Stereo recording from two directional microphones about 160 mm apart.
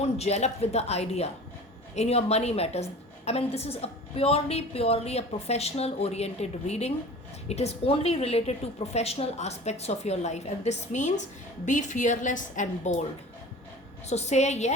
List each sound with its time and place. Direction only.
0.0 s a woman's voice: 45° left (ahead or behind)
14.1 s a woman's voice: 45° left (ahead or behind)